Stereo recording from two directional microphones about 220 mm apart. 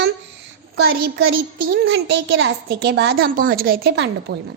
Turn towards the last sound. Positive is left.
turn(degrees=-50)  # may be behind; listen again after turning